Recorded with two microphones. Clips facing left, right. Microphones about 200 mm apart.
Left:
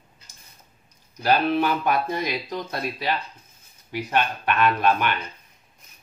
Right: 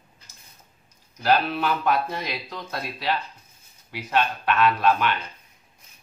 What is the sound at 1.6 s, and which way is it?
Speech, 15° left (ahead or behind).